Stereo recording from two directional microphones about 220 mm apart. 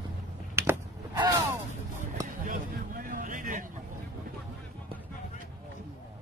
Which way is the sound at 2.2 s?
35° right (ahead or behind).